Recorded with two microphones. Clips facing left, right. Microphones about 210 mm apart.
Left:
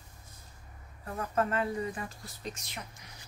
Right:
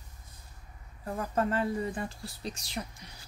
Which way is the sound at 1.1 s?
30° right (ahead or behind).